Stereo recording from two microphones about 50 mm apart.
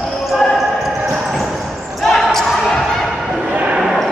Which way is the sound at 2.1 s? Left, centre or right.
Centre.